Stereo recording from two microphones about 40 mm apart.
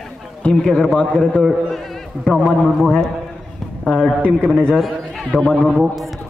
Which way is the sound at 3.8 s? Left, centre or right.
Left.